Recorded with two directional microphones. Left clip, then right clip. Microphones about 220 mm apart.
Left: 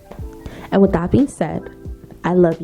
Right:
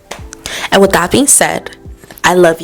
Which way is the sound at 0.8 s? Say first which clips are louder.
Right 8 dB; 10° right (ahead or behind).